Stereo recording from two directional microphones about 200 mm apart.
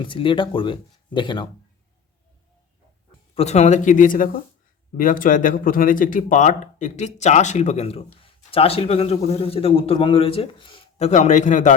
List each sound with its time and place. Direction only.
0.0 s speech: 25° left (ahead or behind)
3.3 s speech: 35° left (ahead or behind)